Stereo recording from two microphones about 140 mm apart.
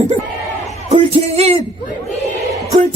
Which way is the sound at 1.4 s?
45° right (ahead or behind).